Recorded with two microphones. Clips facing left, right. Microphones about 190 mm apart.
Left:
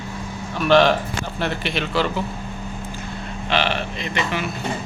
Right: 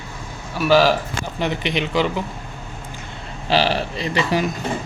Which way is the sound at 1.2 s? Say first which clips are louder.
Right 2 dB; 15° right (ahead or behind).